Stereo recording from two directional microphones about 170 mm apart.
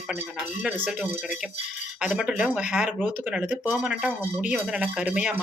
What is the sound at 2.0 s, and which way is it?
Speech, 5° right (ahead or behind).